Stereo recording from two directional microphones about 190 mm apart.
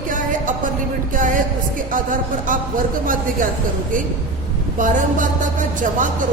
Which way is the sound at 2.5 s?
45° right (ahead or behind).